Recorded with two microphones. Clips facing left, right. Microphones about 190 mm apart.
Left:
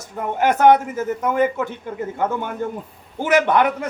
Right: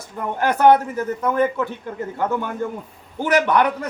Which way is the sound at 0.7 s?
20° left (ahead or behind).